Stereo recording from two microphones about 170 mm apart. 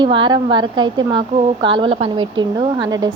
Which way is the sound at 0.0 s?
25° right (ahead or behind).